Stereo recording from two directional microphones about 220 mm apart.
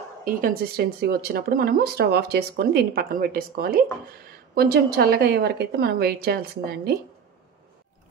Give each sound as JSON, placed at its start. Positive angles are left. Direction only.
{"t": 0.2, "sound": "speech", "side_deg": -40}